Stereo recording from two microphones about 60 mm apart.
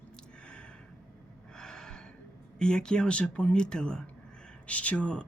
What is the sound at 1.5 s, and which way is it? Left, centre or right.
Gasp, centre.